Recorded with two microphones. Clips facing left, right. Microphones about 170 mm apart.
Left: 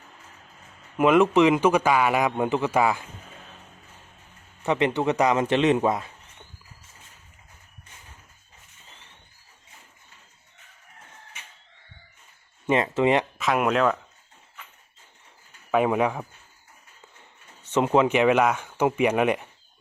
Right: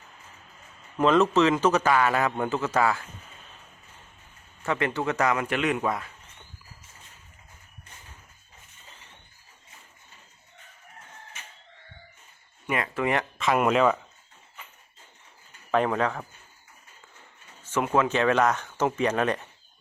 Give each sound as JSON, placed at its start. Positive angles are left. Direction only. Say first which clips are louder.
{"t": 0.9, "sound": "speech", "louder": "left 3 dB", "side_deg": 10}
{"t": 4.6, "sound": "speech", "louder": "left 4 dB", "side_deg": 20}
{"t": 12.6, "sound": "speech", "louder": "left 6 dB", "side_deg": 25}
{"t": 13.4, "sound": "speech", "louder": "right 4 dB", "side_deg": 0}
{"t": 15.7, "sound": "speech", "louder": "left 3 dB", "side_deg": 10}
{"t": 17.7, "sound": "speech", "louder": "left 4 dB", "side_deg": 20}